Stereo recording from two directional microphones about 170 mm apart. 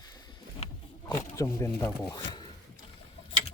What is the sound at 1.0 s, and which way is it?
Speech, 20° left (ahead or behind).